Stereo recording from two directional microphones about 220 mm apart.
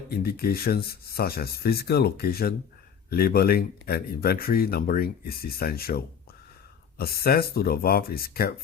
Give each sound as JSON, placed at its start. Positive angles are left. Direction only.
{"t": 0.1, "sound": "speech", "side_deg": 45}
{"t": 7.0, "sound": "speech", "side_deg": 45}